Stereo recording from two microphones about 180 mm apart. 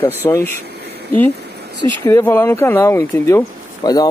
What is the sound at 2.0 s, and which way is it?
Speech, 15° left (ahead or behind).